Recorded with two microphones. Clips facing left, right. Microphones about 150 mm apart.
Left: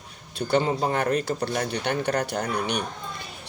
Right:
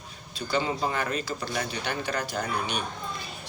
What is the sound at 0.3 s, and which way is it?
Speech, 65° left (ahead or behind).